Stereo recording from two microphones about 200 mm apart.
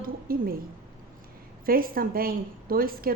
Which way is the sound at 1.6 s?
45° right (ahead or behind).